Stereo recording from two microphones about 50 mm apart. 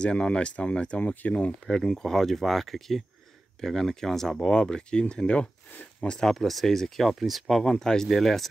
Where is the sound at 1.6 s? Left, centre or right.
Centre.